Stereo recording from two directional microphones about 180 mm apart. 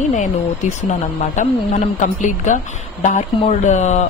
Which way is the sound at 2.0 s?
45° left (ahead or behind).